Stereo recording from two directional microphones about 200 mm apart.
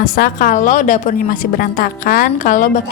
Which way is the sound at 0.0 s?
45° left (ahead or behind).